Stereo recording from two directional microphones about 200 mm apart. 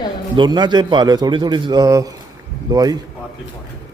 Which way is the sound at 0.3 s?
20° right (ahead or behind).